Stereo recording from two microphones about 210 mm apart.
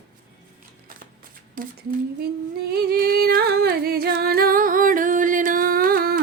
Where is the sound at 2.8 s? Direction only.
45° right (ahead or behind).